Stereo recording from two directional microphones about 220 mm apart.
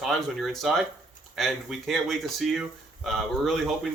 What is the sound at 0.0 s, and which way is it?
Speech, centre (ahead or behind).